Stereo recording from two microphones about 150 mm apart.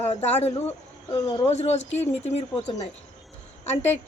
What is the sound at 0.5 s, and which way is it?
Speech, 15° left (ahead or behind).